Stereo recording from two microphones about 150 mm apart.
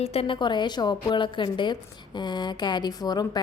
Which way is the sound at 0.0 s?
40° left (ahead or behind).